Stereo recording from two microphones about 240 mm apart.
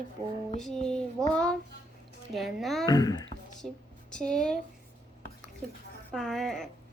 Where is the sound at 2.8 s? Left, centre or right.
Centre.